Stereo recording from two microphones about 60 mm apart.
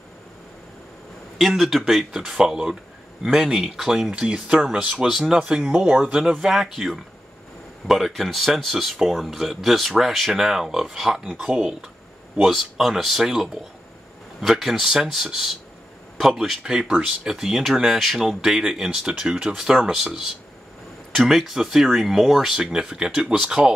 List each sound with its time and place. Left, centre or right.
1.4 s speech: centre
6.4 s speech: centre
12.4 s speech: centre
16.2 s speech: centre
21.1 s speech: centre